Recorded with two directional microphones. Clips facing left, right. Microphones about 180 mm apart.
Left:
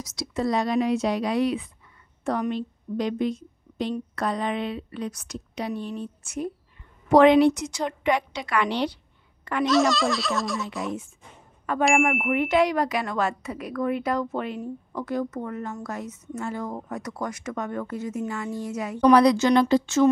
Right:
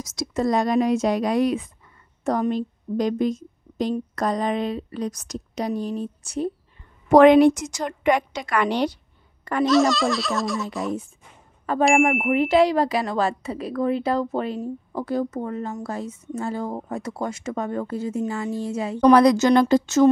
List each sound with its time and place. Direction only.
0.0 s a woman's voice: 45° right (ahead or behind)
7.1 s a woman's voice: 50° right (ahead or behind)
9.4 s a sound: 40° right (ahead or behind)
9.7 s a child's voice: centre (ahead or behind)
11.7 s speech: 35° right (ahead or behind)
18.9 s a woman's voice: 45° right (ahead or behind)